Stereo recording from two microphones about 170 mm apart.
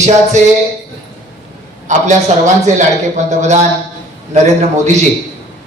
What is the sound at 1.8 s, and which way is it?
A man's voice, 45° right (ahead or behind).